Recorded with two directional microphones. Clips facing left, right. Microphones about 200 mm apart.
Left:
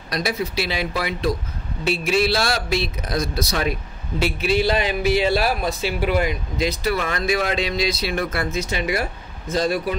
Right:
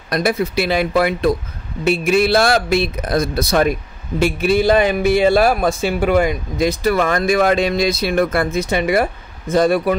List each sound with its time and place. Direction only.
0.1 s a man's voice: 55° right (ahead or behind)